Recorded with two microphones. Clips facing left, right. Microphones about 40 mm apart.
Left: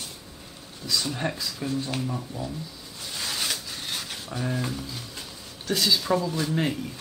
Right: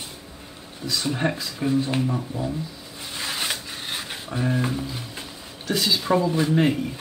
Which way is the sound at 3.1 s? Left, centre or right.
Right.